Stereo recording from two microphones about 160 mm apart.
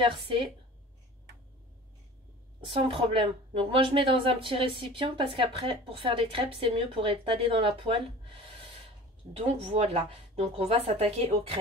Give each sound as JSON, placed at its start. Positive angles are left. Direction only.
{"t": 0.0, "sound": "speech", "side_deg": -35}
{"t": 2.6, "sound": "speech", "side_deg": -35}
{"t": 9.6, "sound": "speech", "side_deg": -35}